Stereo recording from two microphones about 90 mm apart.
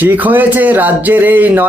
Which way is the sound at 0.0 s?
20° right (ahead or behind).